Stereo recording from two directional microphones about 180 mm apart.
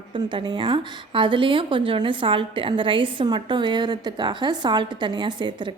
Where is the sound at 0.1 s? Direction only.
25° right (ahead or behind).